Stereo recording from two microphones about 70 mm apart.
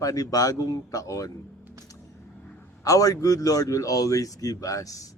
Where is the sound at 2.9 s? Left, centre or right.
Left.